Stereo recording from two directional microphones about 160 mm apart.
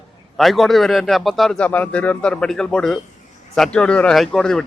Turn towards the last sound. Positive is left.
turn(degrees=5)  # may be behind; listen again after turning